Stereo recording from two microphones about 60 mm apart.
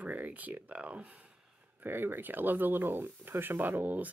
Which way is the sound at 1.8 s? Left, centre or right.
Right.